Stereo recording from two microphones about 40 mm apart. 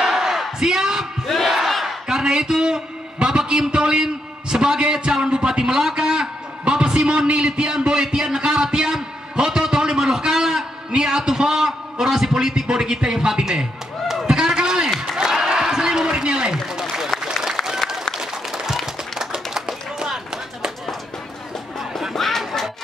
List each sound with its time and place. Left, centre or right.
0.0 s crowd: centre
1.2 s battle cry: centre
2.0 s a sound: centre
4.9 s a man's voice: centre
5.2 s a man's voice: right
14.2 s a sound: right
17.2 s applause: centre
19.1 s clapping: centre
22.1 s music: centre